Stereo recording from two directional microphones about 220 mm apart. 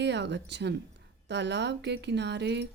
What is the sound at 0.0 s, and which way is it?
Speech, 50° right (ahead or behind).